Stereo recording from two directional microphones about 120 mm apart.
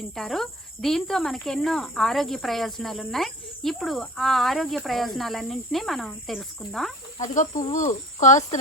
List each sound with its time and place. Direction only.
0.2 s speech: centre (ahead or behind)
7.2 s cricket: 90° left